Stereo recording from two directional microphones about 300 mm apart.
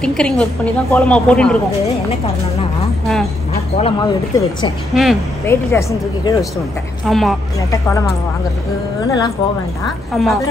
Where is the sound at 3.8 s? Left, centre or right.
Centre.